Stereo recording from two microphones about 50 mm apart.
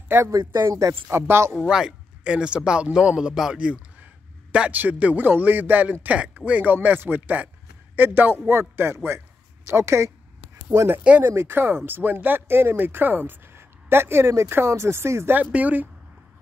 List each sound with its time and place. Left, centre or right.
0.2 s speech: right
1.0 s speech: right
1.7 s speech: centre; by 5.2 s right
5.2 s speech: right
6.0 s speech: right
11.2 s speech: right
15.5 s speech: right